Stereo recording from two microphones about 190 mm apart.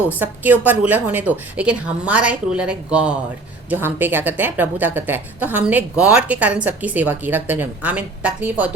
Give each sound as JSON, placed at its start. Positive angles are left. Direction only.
{"t": 0.0, "sound": "speech", "side_deg": -10}